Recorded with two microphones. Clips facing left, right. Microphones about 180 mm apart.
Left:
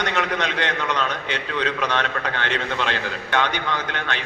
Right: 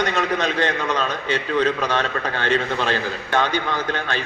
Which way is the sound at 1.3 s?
70° left (ahead or behind).